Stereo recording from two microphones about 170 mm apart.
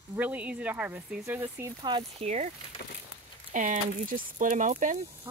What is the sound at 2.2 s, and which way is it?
Speech, 40° right (ahead or behind).